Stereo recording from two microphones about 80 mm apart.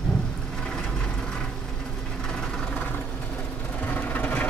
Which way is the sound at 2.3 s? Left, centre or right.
Centre.